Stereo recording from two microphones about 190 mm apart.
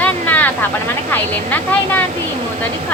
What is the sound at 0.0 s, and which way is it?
Vehicle, 10° left (ahead or behind).